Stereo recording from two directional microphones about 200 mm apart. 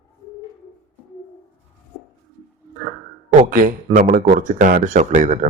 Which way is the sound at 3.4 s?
40° right (ahead or behind).